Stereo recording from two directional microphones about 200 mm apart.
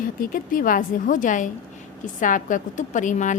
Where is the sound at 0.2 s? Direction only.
45° left (ahead or behind).